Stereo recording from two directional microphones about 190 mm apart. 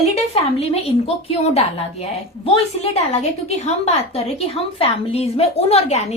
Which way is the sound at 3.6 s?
35° left (ahead or behind).